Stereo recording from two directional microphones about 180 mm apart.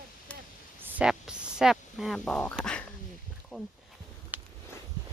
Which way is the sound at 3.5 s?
5° left (ahead or behind).